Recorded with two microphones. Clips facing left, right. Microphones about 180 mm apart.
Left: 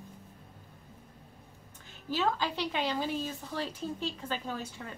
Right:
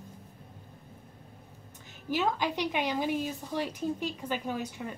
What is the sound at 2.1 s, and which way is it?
A woman's voice, 15° right (ahead or behind).